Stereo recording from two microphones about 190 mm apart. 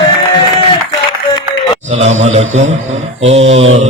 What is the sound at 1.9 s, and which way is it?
Speech, 35° right (ahead or behind).